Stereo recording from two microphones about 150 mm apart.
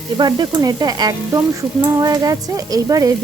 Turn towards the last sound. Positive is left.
turn(degrees=-25)  # may be behind; listen again after turning